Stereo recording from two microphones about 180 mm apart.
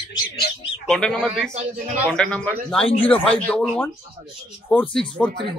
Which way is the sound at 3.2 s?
5° left (ahead or behind).